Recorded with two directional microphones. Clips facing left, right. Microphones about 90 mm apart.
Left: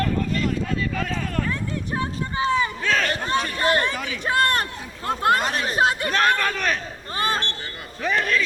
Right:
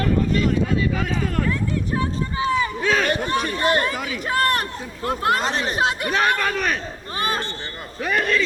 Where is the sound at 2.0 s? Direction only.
30° left (ahead or behind).